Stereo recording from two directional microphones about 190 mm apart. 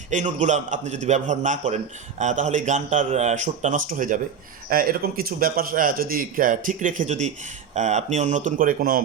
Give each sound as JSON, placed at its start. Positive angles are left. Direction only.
{"t": 0.1, "sound": "a man's voice", "side_deg": -40}